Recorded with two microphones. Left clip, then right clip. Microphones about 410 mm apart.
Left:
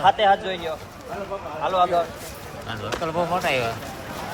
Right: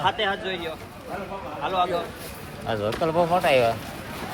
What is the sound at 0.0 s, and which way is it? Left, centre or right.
Speech, left.